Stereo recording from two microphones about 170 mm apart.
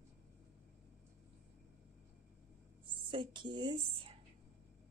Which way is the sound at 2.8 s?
30° right (ahead or behind).